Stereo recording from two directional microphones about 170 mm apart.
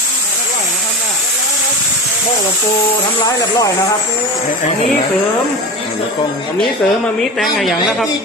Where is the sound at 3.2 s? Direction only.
20° left (ahead or behind).